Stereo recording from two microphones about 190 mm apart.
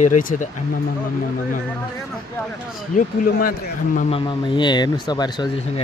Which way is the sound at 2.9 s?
45° left (ahead or behind).